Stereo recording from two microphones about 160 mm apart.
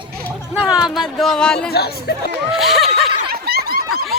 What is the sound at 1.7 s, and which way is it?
Speech, 80° left.